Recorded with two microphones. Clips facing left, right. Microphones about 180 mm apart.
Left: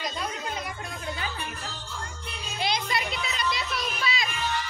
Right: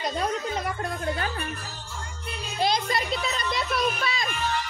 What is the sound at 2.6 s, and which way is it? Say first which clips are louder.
Music: right 4 dB; 45° right (ahead or behind).